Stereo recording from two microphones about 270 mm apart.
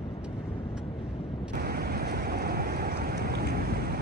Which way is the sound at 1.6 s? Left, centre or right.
Right.